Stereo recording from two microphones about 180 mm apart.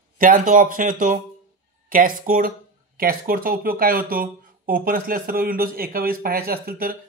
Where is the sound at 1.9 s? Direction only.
50° right (ahead or behind).